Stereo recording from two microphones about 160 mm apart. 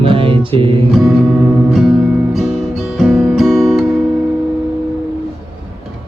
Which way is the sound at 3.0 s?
Centre (ahead or behind).